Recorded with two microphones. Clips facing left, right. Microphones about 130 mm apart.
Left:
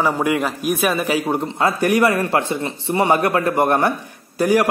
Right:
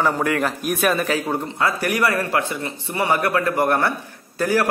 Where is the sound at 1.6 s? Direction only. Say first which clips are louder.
Left 5 dB; 25° left (ahead or behind).